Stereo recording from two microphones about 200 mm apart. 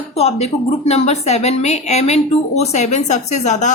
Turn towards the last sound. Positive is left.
turn(degrees=35)  # may be behind; listen again after turning